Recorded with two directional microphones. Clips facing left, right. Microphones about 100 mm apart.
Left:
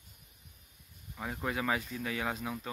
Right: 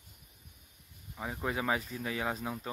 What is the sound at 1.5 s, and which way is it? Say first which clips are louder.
Speech: right 1 dB; 25° right (ahead or behind).